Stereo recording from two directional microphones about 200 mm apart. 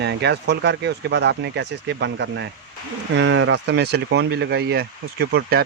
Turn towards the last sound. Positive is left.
turn(degrees=-55)  # may be behind; listen again after turning